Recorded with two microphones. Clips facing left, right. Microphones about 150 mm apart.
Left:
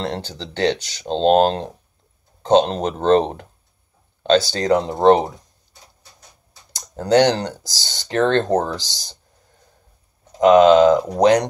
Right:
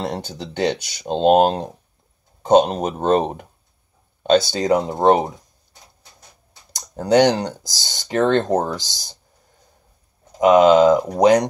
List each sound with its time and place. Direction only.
0.0 s speech: 10° right (ahead or behind)
6.7 s speech: 15° right (ahead or behind)
10.4 s speech: 10° right (ahead or behind)